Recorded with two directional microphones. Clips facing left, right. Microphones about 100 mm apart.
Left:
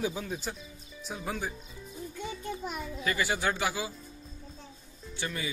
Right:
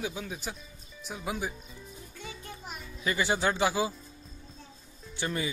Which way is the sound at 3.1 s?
25° right (ahead or behind).